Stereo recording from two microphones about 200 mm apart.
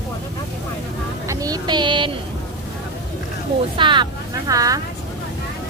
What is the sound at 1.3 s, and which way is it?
Child singing, 20° right (ahead or behind).